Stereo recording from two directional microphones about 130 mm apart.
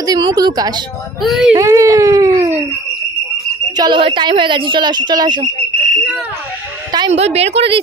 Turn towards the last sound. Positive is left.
turn(degrees=-55)  # may be behind; listen again after turning